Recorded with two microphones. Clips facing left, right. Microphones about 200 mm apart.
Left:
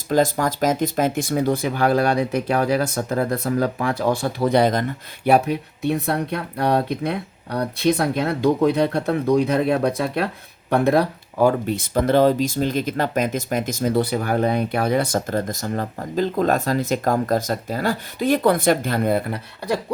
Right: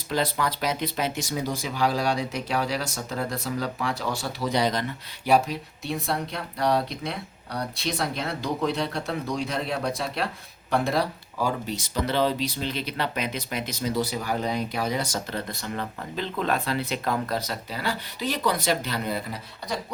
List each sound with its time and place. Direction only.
0.1 s speech: 45° left (ahead or behind)